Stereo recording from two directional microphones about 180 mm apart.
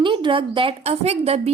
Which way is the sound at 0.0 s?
25° right (ahead or behind).